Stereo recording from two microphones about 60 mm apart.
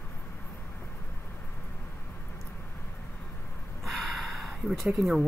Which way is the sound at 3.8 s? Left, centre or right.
Centre.